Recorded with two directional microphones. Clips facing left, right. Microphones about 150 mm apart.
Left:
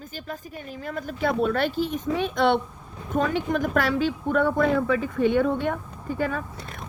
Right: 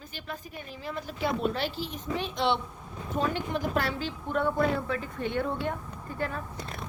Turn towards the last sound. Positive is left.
turn(degrees=90)